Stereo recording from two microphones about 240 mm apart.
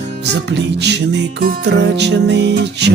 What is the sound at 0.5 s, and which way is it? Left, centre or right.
Music, right.